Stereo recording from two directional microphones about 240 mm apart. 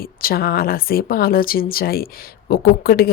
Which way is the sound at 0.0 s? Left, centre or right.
Left.